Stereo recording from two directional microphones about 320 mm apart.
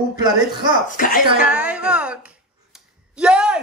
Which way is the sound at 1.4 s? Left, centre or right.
Centre.